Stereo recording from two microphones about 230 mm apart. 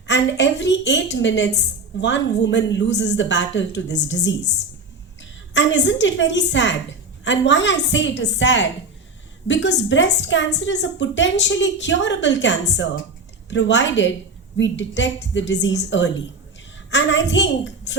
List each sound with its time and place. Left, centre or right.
0.1 s a woman's voice: left
5.5 s a woman's voice: left